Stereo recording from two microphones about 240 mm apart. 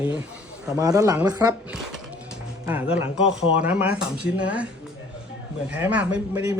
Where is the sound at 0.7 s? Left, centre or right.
Centre.